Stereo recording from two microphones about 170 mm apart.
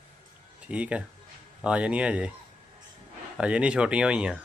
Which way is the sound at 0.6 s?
5° right (ahead or behind).